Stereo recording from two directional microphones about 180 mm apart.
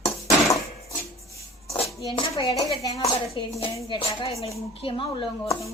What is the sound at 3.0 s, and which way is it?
A woman's voice, 35° left (ahead or behind).